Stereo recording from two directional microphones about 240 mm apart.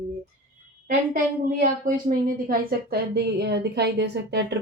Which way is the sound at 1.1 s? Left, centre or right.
Right.